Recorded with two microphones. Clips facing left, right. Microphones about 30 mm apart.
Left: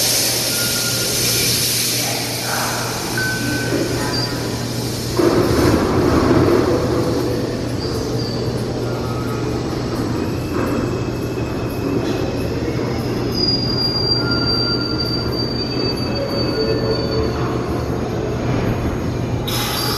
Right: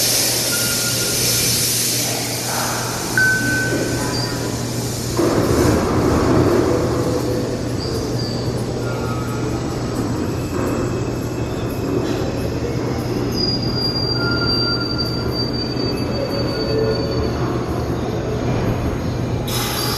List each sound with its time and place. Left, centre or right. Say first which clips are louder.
3.2 s music: right 6 dB; left
5.1 s vehicle: left 2 dB; left